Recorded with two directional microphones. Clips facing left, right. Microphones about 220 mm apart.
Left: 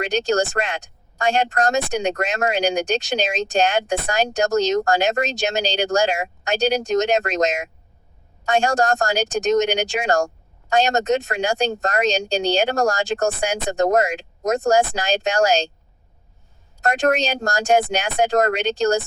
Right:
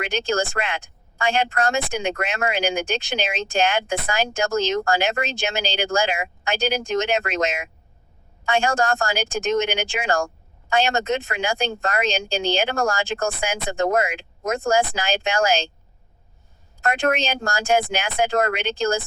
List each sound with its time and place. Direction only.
0.1 s speech: 40° left (ahead or behind)
16.8 s speech: 40° left (ahead or behind)